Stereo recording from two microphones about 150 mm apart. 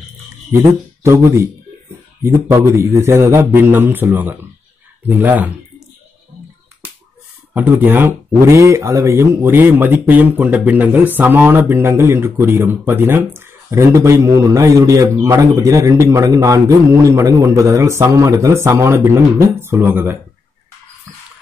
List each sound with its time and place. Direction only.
1.0 s speech: 20° right (ahead or behind)
7.5 s speech: 10° right (ahead or behind)